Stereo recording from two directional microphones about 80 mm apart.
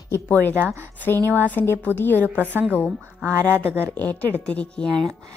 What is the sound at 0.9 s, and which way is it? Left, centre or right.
Speech, left.